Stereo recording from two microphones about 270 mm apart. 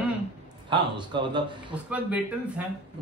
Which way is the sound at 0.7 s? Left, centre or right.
Centre.